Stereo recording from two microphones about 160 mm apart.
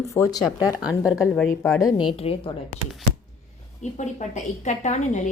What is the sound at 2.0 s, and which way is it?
Speech, 35° left (ahead or behind).